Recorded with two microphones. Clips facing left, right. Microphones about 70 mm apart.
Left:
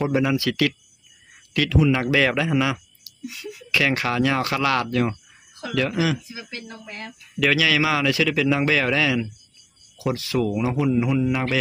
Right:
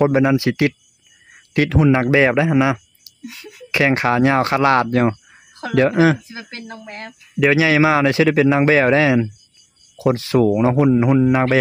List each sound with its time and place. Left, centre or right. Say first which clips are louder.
0.1 s a man's voice: right 6 dB; right
1.5 s speech: right 4 dB; right
1.9 s speech: right 6 dB; right
7.3 s speech: right 6 dB; right